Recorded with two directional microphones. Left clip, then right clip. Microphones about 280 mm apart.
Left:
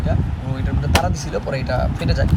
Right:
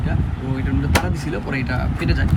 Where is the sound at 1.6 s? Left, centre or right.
Centre.